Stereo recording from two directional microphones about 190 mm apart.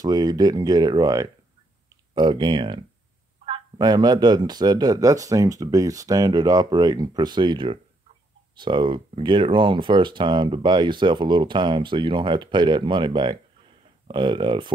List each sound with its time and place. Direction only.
0.0 s speech: 20° right (ahead or behind)